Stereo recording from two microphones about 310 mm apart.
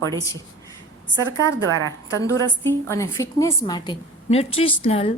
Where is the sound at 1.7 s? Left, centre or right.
Right.